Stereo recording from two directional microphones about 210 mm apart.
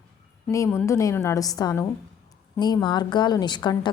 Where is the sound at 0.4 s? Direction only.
15° left (ahead or behind).